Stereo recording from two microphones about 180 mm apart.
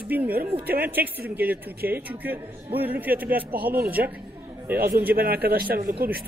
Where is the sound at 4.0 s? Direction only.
65° right (ahead or behind).